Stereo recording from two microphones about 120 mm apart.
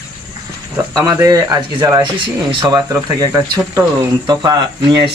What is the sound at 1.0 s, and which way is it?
Speech, 30° right (ahead or behind).